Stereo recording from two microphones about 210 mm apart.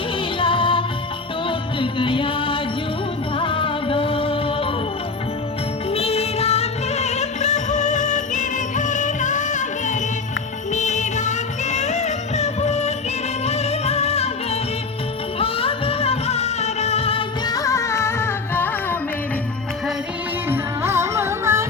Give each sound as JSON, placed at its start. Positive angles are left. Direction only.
{"t": 0.3, "sound": "music", "side_deg": 25}
{"t": 5.9, "sound": "music", "side_deg": 30}
{"t": 20.5, "sound": "music", "side_deg": -10}